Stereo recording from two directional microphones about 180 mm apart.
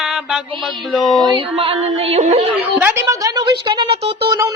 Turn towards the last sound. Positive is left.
turn(degrees=-25)  # may be behind; listen again after turning